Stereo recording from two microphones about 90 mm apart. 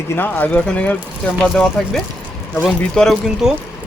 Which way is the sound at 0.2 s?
20° left (ahead or behind).